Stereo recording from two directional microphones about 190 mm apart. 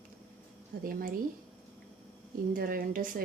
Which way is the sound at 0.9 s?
50° right (ahead or behind).